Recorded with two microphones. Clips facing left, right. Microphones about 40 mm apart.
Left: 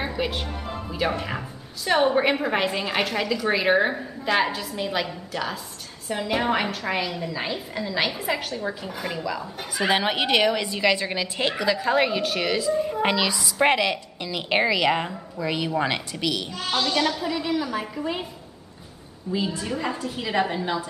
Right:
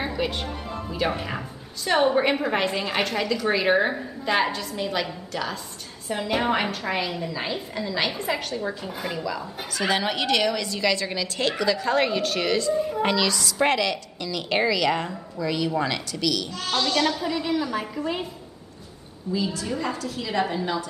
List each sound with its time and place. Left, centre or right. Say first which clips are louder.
0.0 s a woman's voice: even; centre
9.8 s a woman's voice: left 2 dB; left; by 13.0 s centre
13.0 s a woman's voice: even; centre
16.8 s a woman's voice: right 1 dB; centre
19.3 s a woman's voice: even; left